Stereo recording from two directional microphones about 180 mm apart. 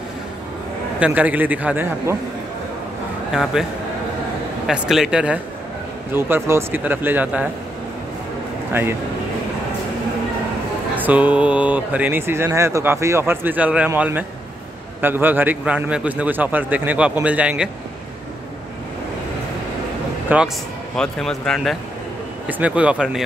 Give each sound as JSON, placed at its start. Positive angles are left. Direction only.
{"t": 0.9, "sound": "speech", "side_deg": -10}
{"t": 3.3, "sound": "a man's voice", "side_deg": -5}
{"t": 4.6, "sound": "speech", "side_deg": 0}
{"t": 11.0, "sound": "speech", "side_deg": -10}
{"t": 20.3, "sound": "speech", "side_deg": -10}
{"t": 20.9, "sound": "speech", "side_deg": 5}